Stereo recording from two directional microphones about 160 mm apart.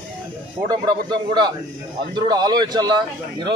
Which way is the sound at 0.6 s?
25° right (ahead or behind).